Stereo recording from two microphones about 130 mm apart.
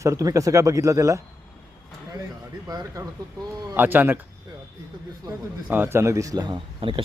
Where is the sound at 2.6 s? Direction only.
30° right (ahead or behind).